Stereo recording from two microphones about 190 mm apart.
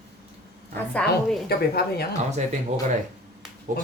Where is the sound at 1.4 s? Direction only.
55° left (ahead or behind).